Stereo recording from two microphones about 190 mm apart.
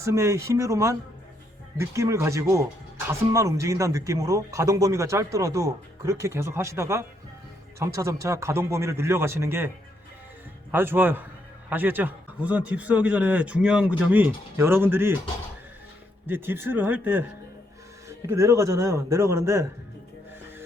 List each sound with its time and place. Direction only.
0.0 s speech: 15° right (ahead or behind)
16.2 s speech: 10° right (ahead or behind)
18.3 s speech: 15° right (ahead or behind)